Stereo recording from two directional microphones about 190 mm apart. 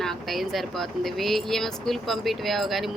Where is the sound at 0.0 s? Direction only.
Centre (ahead or behind).